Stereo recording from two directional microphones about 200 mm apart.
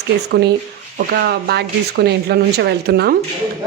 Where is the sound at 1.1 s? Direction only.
50° right (ahead or behind).